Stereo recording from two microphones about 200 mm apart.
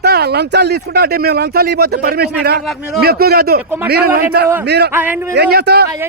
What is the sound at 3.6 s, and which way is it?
Speech, 10° right (ahead or behind).